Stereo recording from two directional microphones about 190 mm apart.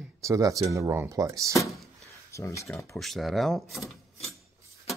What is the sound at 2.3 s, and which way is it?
Speech, 15° left (ahead or behind).